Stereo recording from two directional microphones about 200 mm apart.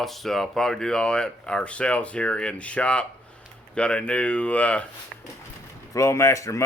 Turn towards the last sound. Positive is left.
turn(degrees=15)  # may be behind; listen again after turning